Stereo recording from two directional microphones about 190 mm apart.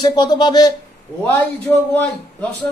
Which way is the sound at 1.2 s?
10° left (ahead or behind).